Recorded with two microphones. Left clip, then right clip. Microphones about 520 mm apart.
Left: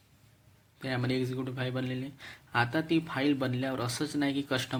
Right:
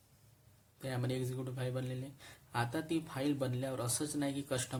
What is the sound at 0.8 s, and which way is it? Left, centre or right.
Speech, right.